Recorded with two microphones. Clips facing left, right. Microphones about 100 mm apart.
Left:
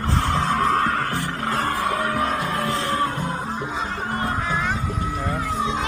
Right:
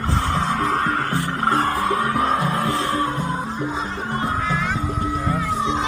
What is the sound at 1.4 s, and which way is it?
Music, 35° right (ahead or behind).